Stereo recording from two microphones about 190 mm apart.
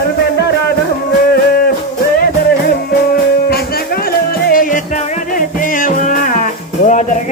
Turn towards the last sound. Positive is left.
turn(degrees=40)  # may be behind; listen again after turning